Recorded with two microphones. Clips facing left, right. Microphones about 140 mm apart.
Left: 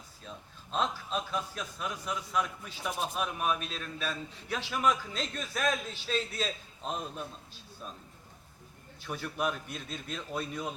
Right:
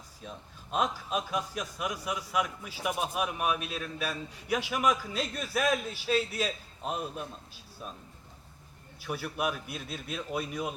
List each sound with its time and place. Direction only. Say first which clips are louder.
0.3 s a man's voice: right 3 dB; 10° right (ahead or behind)
9.0 s a man's voice: right 1 dB; 10° right (ahead or behind)